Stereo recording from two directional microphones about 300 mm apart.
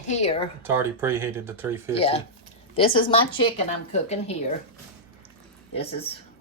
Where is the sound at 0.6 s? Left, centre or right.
Centre.